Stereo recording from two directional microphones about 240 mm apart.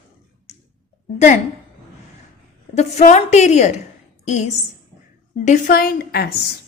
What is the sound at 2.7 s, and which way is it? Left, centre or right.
A woman's voice, left.